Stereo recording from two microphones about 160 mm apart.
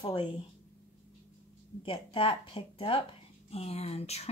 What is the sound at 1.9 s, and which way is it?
Speech, 35° left (ahead or behind).